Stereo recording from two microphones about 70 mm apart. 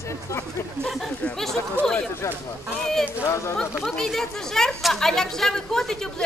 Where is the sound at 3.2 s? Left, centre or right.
Left.